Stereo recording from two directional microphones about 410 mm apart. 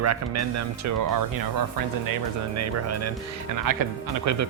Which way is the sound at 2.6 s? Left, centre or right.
Right.